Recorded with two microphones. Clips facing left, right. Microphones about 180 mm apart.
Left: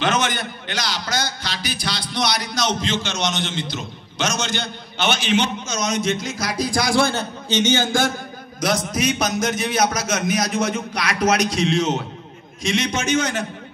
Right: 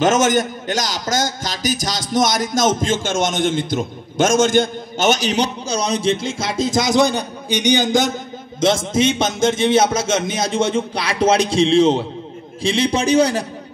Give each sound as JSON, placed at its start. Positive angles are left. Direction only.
{"t": 0.0, "sound": "a man's voice", "side_deg": -45}